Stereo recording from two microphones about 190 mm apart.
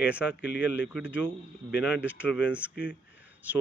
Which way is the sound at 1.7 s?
60° left (ahead or behind).